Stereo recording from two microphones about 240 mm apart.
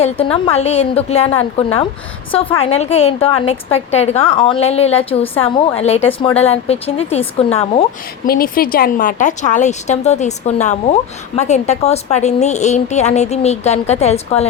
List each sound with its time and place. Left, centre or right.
0.0 s speech: left
8.3 s speech: left